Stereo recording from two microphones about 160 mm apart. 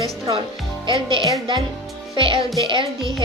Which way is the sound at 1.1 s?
30° right (ahead or behind).